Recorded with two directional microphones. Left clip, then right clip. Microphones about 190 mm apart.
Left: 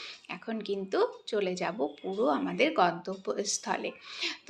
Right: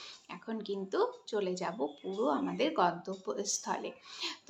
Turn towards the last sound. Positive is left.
turn(degrees=5)  # may be behind; listen again after turning